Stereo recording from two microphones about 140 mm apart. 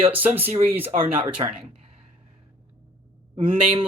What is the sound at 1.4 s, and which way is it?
Speech, 35° right (ahead or behind).